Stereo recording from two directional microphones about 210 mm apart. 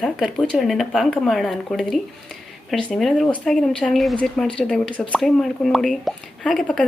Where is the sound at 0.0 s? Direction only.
Centre (ahead or behind).